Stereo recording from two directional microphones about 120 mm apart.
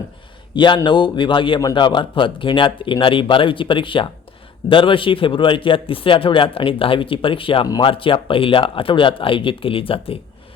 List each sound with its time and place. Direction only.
0.5 s a man's voice: 40° left (ahead or behind)